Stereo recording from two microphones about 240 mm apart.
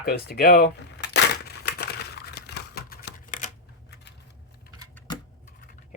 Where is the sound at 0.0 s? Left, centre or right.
Left.